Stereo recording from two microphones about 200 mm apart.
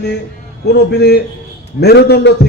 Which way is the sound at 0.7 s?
55° left (ahead or behind).